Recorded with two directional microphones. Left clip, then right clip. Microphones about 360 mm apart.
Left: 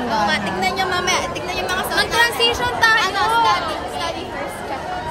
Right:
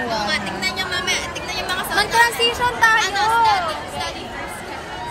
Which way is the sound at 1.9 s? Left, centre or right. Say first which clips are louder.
Right 1 dB; centre.